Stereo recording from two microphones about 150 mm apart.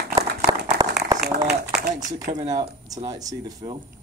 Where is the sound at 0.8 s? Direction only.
25° right (ahead or behind).